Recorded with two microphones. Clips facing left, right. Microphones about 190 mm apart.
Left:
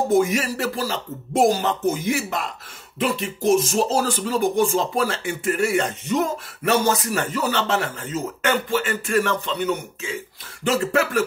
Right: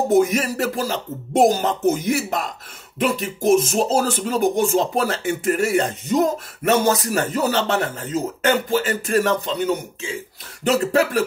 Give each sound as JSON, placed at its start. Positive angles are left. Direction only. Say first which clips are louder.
{"t": 0.2, "sound": "speech", "louder": "right 2 dB", "side_deg": -40}
{"t": 3.7, "sound": "speech", "louder": "right 2 dB", "side_deg": -45}